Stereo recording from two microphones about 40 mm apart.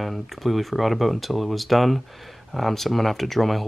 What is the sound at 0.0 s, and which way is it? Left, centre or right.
Speech, centre.